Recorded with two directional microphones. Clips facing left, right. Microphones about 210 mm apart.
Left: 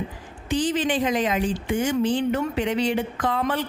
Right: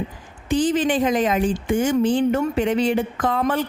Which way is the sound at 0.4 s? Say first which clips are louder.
Right 4 dB; 50° right (ahead or behind).